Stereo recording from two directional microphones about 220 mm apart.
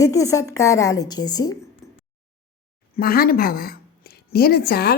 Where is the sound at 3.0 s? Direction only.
40° left (ahead or behind).